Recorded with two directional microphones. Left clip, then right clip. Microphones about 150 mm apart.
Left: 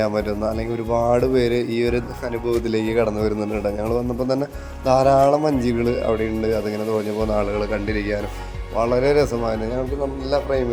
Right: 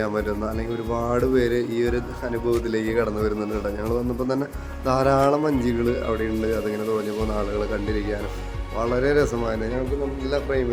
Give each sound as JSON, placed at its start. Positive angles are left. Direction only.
{"t": 0.0, "sound": "speech", "side_deg": 20}
{"t": 4.9, "sound": "speech", "side_deg": 5}
{"t": 5.4, "sound": "speech", "side_deg": 15}